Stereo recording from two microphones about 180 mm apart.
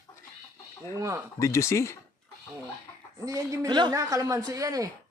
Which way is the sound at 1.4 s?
15° left (ahead or behind).